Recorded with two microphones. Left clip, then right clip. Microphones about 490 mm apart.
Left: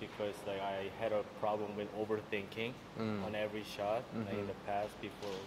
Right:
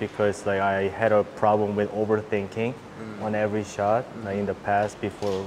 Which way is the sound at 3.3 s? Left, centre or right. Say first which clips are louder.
Right 14 dB; right.